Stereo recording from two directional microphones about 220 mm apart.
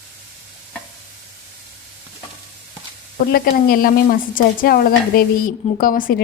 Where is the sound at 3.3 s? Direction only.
40° left (ahead or behind).